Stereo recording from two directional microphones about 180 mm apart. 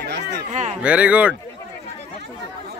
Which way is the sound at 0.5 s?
40° right (ahead or behind).